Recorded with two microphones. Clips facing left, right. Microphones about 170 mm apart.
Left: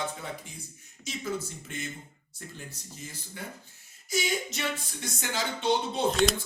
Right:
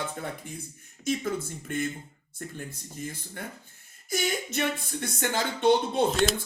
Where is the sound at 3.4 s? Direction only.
55° right (ahead or behind).